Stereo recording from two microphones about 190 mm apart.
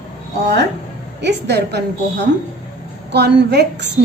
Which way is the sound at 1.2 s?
65° right (ahead or behind).